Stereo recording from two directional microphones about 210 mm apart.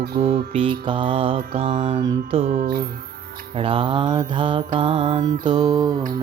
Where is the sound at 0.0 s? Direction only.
45° right (ahead or behind).